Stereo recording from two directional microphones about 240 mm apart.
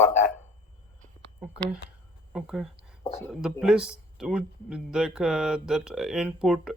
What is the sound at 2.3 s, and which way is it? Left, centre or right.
Speech, centre.